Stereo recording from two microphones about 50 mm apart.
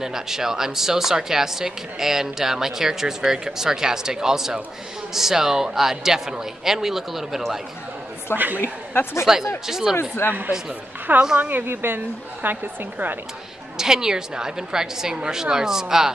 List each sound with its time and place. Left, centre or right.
0.0 s speech: centre
8.3 s speech: left
9.2 s speech: centre
9.9 s speech: left
11.1 s a woman's voice: right
13.7 s speech: centre